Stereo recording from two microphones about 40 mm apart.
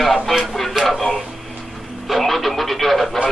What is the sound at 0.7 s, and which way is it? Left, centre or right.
Speech, centre.